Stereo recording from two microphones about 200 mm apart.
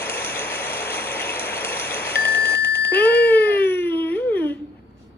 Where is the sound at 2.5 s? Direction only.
55° left (ahead or behind).